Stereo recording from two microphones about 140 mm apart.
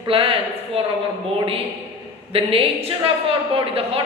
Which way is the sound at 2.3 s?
45° right (ahead or behind).